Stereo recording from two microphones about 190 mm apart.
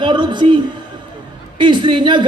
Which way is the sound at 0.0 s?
25° right (ahead or behind).